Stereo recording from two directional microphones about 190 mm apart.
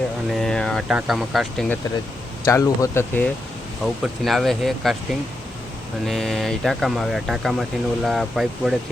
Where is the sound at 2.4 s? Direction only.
15° left (ahead or behind).